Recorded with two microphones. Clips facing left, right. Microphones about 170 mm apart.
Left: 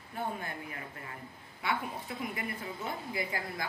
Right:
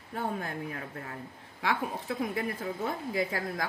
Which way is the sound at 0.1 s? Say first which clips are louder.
Right 3 dB; 90° right.